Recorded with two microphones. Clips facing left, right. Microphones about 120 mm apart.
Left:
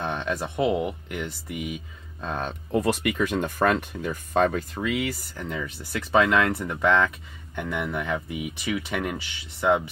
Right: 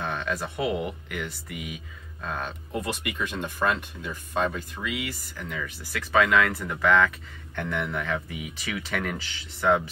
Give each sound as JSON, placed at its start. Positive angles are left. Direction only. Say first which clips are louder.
{"t": 0.0, "sound": "speech", "louder": "left 2 dB", "side_deg": 25}
{"t": 2.9, "sound": "speech", "louder": "left 7 dB", "side_deg": 50}
{"t": 5.4, "sound": "speech", "louder": "left 2 dB", "side_deg": 30}